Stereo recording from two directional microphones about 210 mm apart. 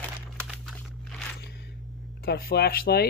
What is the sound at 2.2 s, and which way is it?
Speech, 50° left (ahead or behind).